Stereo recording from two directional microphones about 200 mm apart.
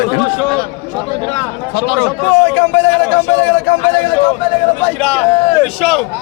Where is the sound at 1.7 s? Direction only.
65° left (ahead or behind).